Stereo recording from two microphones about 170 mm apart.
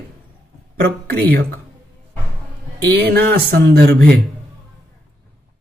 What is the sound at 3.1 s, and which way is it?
Speech, 65° right (ahead or behind).